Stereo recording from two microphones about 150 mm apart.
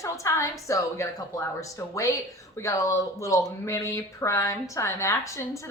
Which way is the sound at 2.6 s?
20° left (ahead or behind).